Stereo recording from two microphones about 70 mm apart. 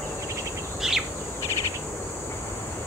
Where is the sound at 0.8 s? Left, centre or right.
Centre.